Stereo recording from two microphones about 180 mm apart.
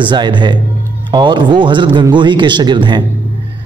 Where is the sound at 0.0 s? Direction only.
25° right (ahead or behind).